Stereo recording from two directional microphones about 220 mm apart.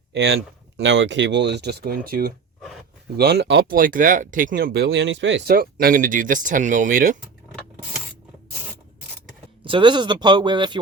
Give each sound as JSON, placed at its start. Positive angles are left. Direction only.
{"t": 0.1, "sound": "speech", "side_deg": -50}
{"t": 9.6, "sound": "speech", "side_deg": -20}